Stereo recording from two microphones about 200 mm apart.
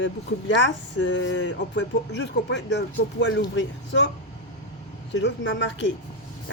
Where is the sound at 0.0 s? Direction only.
65° left (ahead or behind).